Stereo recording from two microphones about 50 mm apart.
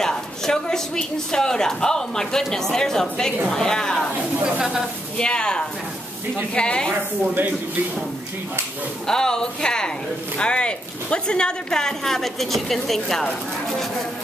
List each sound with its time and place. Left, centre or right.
0.0 s a woman's voice: centre
4.6 s a woman's voice: centre
5.1 s a woman's voice: centre
9.0 s a woman's voice: centre